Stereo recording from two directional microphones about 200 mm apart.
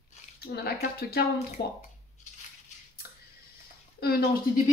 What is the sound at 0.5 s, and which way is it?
Speech, 50° left (ahead or behind).